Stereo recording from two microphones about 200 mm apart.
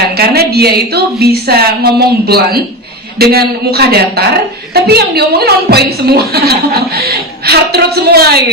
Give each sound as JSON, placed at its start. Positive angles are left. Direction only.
{"t": 0.2, "sound": "a woman's voice", "side_deg": -50}